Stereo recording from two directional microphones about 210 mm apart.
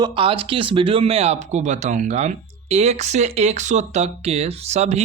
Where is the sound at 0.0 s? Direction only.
25° right (ahead or behind).